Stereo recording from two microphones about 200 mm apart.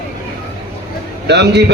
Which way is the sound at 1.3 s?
55° right (ahead or behind).